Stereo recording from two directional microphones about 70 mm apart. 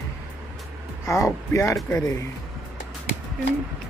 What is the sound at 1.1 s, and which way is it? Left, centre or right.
Speech, left.